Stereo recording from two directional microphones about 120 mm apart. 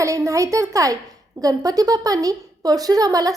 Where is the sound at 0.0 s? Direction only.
25° right (ahead or behind).